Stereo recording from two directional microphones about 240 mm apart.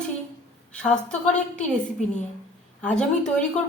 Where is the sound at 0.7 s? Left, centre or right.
Centre.